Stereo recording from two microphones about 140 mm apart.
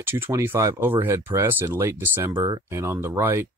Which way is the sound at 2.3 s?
30° right (ahead or behind).